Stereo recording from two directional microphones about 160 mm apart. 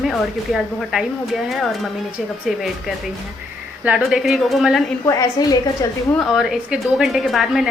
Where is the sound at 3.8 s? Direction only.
5° right (ahead or behind).